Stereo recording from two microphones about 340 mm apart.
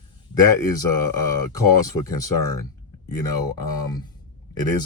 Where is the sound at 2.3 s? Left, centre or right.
Left.